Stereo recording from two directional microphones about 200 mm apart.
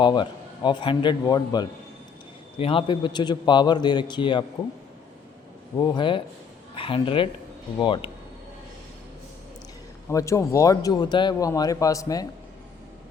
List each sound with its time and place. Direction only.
0.0 s a man's voice: 20° left (ahead or behind)
5.7 s a man's voice: 20° left (ahead or behind)
10.1 s speech: 15° left (ahead or behind)